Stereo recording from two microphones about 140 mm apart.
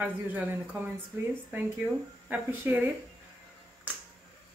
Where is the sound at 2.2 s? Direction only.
15° right (ahead or behind).